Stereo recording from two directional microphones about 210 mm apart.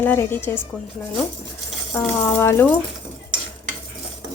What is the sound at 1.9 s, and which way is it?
Speech, 5° left (ahead or behind).